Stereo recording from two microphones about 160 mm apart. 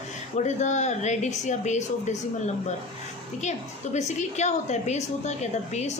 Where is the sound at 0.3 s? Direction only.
50° left (ahead or behind).